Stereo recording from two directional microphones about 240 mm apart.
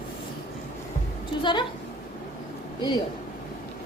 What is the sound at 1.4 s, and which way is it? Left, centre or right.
Speech, centre.